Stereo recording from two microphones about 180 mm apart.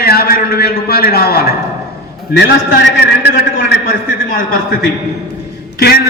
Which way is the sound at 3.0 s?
65° left (ahead or behind).